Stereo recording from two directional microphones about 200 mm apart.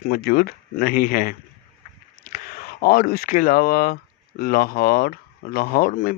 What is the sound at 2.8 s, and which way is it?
Speech, 50° left (ahead or behind).